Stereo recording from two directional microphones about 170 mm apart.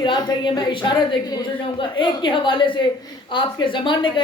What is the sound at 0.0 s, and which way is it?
Speech, 25° left (ahead or behind).